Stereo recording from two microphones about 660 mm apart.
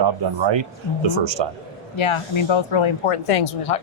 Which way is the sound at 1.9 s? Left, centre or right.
Left.